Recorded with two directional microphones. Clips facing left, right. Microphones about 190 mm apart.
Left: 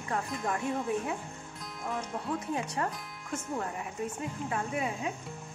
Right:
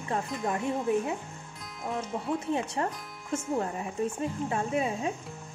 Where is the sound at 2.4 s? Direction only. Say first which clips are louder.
Right 3 dB; 25° right (ahead or behind).